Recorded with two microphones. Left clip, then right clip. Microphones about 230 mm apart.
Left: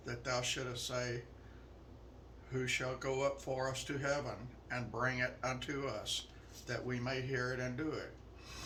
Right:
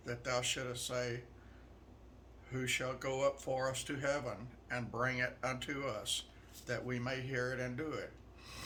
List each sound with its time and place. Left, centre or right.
0.0 s speech: right
2.5 s speech: right